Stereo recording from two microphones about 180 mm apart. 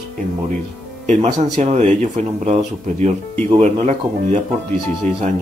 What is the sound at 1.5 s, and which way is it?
Speech, 40° right (ahead or behind).